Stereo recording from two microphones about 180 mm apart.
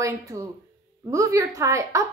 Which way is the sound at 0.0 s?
15° right (ahead or behind).